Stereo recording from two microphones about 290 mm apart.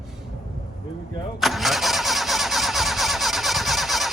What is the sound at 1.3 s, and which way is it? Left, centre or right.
Engine starting, centre.